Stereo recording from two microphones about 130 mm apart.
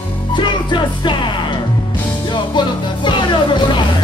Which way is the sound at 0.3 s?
35° left (ahead or behind).